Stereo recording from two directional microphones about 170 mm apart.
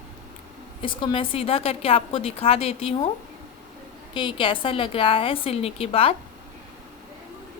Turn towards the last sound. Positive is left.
turn(degrees=35)  # may be behind; listen again after turning